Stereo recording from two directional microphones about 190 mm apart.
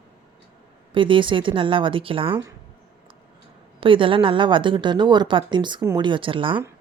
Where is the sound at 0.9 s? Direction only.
25° right (ahead or behind).